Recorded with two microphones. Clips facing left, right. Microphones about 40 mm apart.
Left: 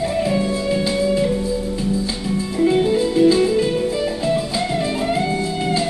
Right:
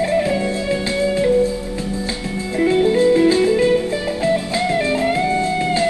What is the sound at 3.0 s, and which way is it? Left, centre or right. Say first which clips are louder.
Music: right 2 dB; right.